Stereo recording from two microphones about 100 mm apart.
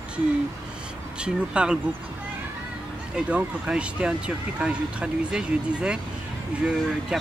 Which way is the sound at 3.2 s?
10° right (ahead or behind).